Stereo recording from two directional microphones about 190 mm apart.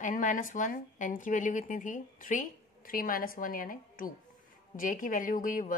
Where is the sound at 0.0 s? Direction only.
40° left (ahead or behind).